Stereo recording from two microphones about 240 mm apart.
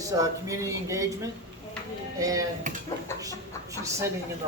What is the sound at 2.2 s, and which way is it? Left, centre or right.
Speech, centre.